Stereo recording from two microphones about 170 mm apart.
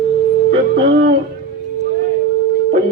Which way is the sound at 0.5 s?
60° right (ahead or behind).